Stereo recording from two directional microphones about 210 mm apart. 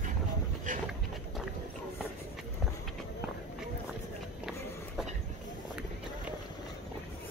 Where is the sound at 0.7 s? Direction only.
40° right (ahead or behind).